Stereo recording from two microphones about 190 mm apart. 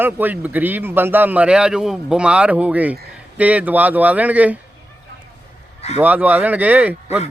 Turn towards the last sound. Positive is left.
turn(degrees=-10)  # may be behind; listen again after turning